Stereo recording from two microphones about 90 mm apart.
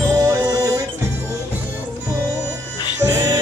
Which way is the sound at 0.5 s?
45° right (ahead or behind).